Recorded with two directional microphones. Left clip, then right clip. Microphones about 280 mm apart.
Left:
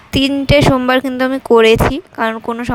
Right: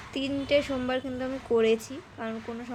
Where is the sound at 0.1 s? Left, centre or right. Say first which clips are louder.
Left 14 dB; left.